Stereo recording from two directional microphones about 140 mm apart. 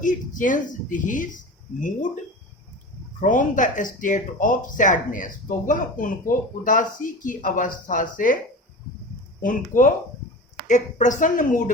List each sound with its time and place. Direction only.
0.0 s speech: 70° left (ahead or behind)
3.2 s speech: 70° left (ahead or behind)
9.4 s speech: 70° left (ahead or behind)